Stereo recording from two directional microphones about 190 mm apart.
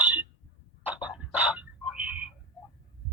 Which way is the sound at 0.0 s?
5° right (ahead or behind).